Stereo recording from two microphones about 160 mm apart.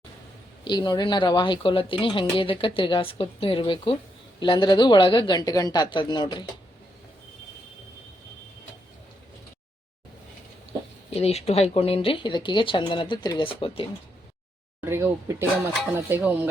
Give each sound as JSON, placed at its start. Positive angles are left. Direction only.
{"t": 0.6, "sound": "speech", "side_deg": 30}
{"t": 11.1, "sound": "speech", "side_deg": 40}
{"t": 14.8, "sound": "speech", "side_deg": -15}